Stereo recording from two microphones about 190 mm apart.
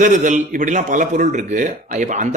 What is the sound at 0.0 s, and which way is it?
Speech, 40° right (ahead or behind).